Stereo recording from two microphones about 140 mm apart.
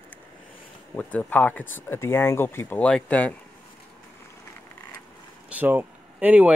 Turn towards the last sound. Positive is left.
turn(degrees=-10)  # may be behind; listen again after turning